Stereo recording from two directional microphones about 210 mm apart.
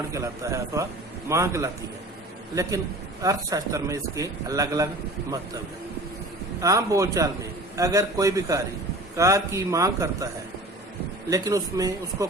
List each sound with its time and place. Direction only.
0.1 s a man's voice: 15° right (ahead or behind)
6.6 s a man's voice: 15° right (ahead or behind)
11.3 s a man's voice: 15° right (ahead or behind)